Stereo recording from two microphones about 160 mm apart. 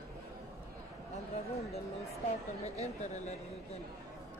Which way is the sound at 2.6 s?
45° left (ahead or behind).